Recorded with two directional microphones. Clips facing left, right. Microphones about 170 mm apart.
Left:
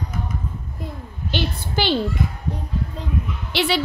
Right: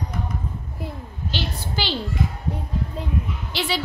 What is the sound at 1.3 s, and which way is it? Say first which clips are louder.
Speech: left 4 dB; 55° left (ahead or behind).